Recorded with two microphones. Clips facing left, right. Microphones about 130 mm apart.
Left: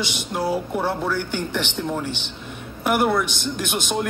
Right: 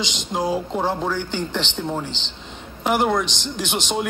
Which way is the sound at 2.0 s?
10° left (ahead or behind).